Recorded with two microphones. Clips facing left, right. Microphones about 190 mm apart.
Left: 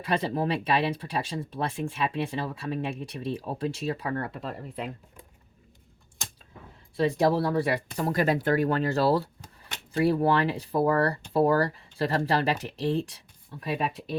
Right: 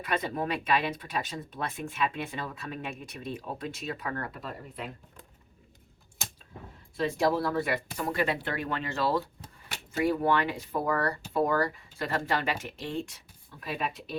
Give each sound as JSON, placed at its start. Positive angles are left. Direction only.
{"t": 0.0, "sound": "speech", "side_deg": 30}
{"t": 6.9, "sound": "speech", "side_deg": 35}